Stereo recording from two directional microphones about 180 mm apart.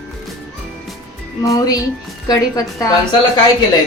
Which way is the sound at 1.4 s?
20° left (ahead or behind).